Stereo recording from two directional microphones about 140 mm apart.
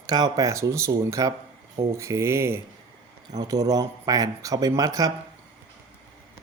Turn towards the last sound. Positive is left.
turn(degrees=-25)  # may be behind; listen again after turning